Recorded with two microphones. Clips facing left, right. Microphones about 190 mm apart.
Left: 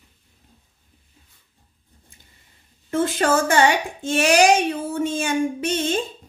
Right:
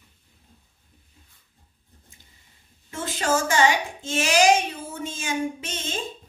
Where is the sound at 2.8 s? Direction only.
55° left (ahead or behind).